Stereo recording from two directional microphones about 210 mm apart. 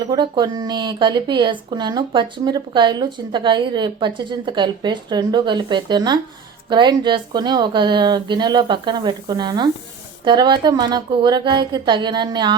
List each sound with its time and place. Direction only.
0.1 s speech: 20° right (ahead or behind)